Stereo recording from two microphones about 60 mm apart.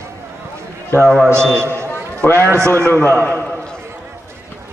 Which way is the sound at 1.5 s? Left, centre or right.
Right.